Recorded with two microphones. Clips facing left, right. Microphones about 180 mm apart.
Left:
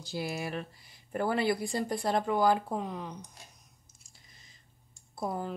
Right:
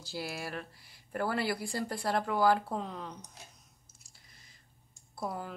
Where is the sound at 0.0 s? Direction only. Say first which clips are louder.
Left 4 dB; 20° left (ahead or behind).